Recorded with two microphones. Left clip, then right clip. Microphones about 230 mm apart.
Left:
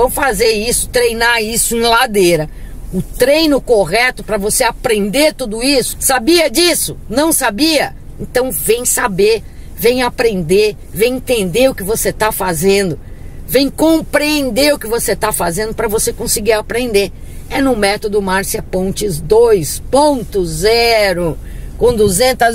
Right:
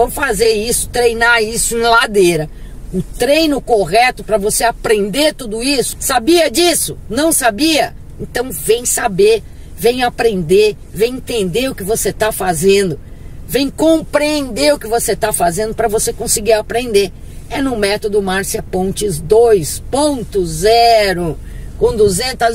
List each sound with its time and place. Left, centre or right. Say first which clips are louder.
0.1 s speech: left 1 dB; centre
21.8 s speech: left 2 dB; left